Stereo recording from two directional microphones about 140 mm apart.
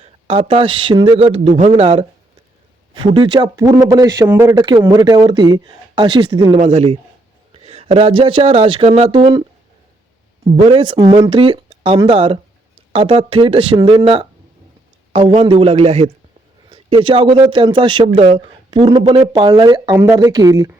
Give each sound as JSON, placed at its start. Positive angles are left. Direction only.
{"t": 0.0, "sound": "a man's voice", "side_deg": -45}
{"t": 4.5, "sound": "a man's voice", "side_deg": -30}
{"t": 6.6, "sound": "a man's voice", "side_deg": -50}
{"t": 10.6, "sound": "a man's voice", "side_deg": -40}
{"t": 16.6, "sound": "a man's voice", "side_deg": -40}
{"t": 18.7, "sound": "a man's voice", "side_deg": -35}